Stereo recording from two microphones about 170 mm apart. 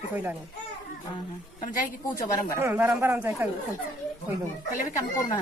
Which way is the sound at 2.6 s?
15° right (ahead or behind).